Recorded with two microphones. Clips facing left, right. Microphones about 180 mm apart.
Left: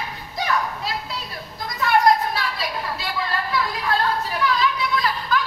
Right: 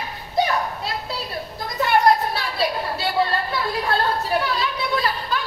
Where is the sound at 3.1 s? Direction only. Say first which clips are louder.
Right 2 dB; 30° right (ahead or behind).